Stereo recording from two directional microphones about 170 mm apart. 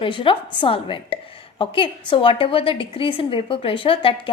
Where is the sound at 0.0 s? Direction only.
30° left (ahead or behind).